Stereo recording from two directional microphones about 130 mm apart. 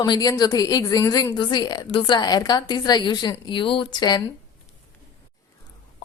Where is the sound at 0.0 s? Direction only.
30° left (ahead or behind).